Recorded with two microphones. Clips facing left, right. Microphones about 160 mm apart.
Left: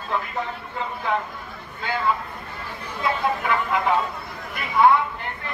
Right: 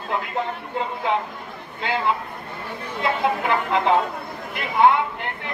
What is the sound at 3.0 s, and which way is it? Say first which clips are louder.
Speech: right 2 dB; 25° right (ahead or behind).